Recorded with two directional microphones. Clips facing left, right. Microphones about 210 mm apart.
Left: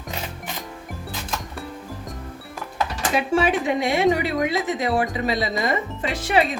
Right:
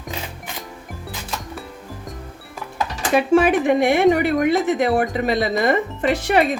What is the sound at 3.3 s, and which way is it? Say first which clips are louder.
Speech: right 6 dB; 55° right (ahead or behind).